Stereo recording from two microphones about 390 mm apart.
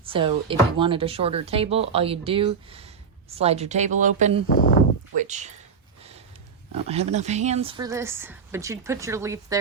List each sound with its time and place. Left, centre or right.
0.0 s speech: centre
6.8 s speech: centre